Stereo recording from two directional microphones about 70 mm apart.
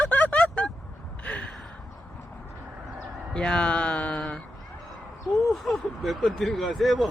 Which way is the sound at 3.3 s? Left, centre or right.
Centre.